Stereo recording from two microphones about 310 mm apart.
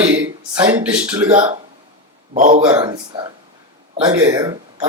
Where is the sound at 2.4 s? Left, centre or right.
Right.